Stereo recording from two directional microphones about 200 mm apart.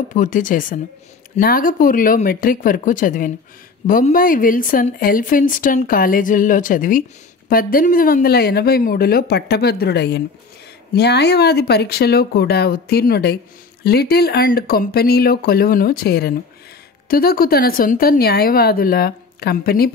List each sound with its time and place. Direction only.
0.1 s speech: 40° left (ahead or behind)